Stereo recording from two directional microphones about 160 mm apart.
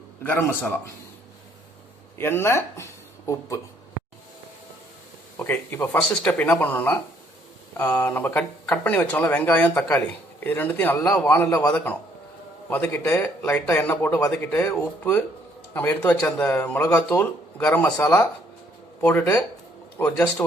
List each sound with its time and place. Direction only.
0.2 s speech: 15° left (ahead or behind)
2.1 s speech: 15° left (ahead or behind)
5.4 s speech: 15° left (ahead or behind)